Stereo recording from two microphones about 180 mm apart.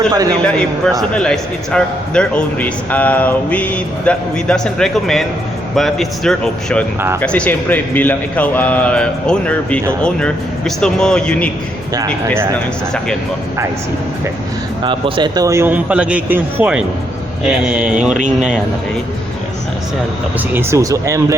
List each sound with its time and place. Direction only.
0.4 s a man's voice: 5° left (ahead or behind)
14.8 s speech: 30° right (ahead or behind); by 18.6 s 5° right (ahead or behind)
20.5 s speech: 15° right (ahead or behind)